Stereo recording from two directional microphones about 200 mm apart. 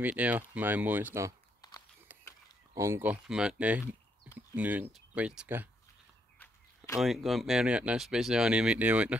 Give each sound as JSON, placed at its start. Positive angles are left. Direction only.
{"t": 0.0, "sound": "speech", "side_deg": -10}
{"t": 2.7, "sound": "speech", "side_deg": -15}
{"t": 6.3, "sound": "walk", "side_deg": 10}
{"t": 7.0, "sound": "speech", "side_deg": 0}